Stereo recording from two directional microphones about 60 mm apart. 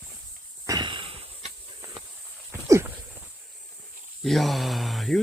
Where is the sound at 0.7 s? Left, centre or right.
Right.